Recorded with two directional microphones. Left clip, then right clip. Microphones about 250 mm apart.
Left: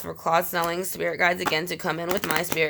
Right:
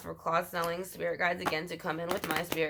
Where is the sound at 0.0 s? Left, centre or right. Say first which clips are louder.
Left 8 dB; left.